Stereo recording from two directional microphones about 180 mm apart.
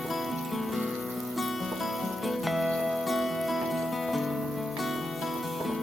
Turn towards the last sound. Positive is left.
turn(degrees=0)  # may be behind; listen again after turning